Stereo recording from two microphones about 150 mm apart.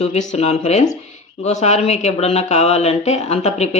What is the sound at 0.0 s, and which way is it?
Speech, 50° left (ahead or behind).